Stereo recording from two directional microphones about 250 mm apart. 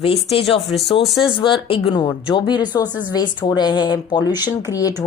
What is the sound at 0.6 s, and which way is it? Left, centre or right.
Speech, centre.